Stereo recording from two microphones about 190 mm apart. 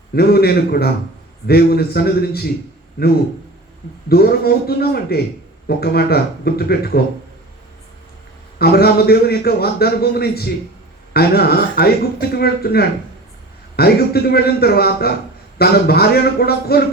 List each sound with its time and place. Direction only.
0.1 s a man's voice: 55° left (ahead or behind)
8.5 s a man's voice: 55° left (ahead or behind)